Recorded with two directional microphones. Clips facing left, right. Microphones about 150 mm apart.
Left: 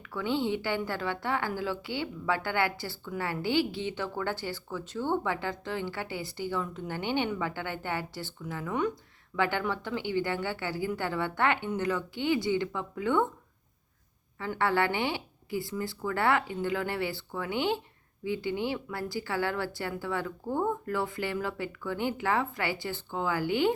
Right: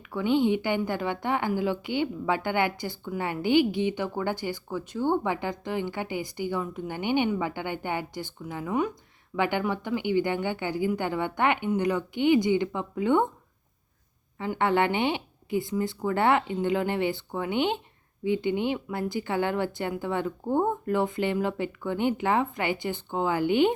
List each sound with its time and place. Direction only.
0.0 s a woman's voice: 15° right (ahead or behind)
14.3 s speech: 20° right (ahead or behind)